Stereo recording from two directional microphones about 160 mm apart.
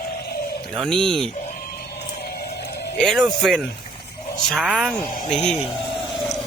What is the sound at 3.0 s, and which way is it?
Speech, centre (ahead or behind).